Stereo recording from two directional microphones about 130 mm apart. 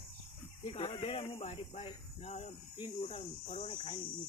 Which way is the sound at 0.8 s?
45° left (ahead or behind).